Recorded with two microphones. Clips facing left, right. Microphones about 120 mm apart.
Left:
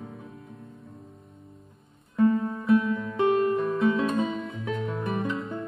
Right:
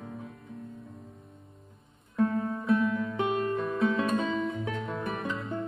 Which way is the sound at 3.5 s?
25° left (ahead or behind).